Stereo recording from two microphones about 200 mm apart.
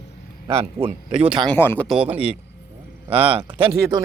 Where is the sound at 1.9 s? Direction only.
5° right (ahead or behind).